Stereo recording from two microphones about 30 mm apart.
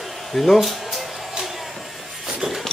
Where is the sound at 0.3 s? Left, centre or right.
Centre.